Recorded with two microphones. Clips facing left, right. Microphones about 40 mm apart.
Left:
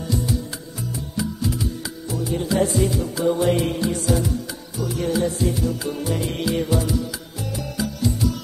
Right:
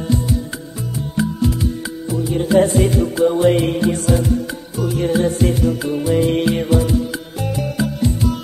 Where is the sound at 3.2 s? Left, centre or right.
Right.